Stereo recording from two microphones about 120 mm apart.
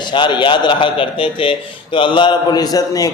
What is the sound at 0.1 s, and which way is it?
A man's voice, 40° left (ahead or behind).